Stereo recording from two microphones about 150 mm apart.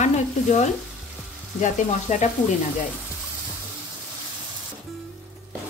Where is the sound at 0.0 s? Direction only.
50° left (ahead or behind).